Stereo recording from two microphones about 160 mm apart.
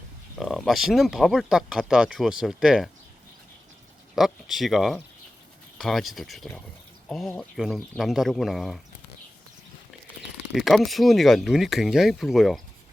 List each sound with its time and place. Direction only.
0.3 s speech: centre (ahead or behind)
4.1 s speech: centre (ahead or behind)
10.5 s speech: centre (ahead or behind)